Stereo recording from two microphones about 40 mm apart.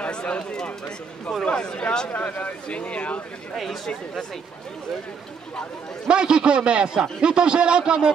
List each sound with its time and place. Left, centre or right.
0.0 s speech: left
2.0 s a man's voice: left
3.6 s speech: centre
6.0 s a man's voice: right